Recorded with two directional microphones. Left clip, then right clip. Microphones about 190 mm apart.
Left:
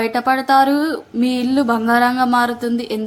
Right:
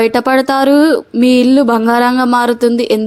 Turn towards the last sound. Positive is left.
turn(degrees=-35)  # may be behind; listen again after turning